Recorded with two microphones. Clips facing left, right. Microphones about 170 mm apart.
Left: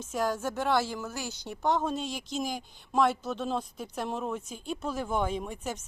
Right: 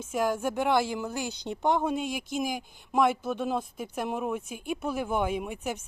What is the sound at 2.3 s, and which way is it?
Speech, 50° right (ahead or behind).